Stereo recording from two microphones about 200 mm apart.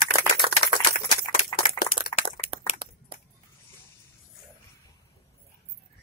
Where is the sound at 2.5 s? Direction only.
25° right (ahead or behind).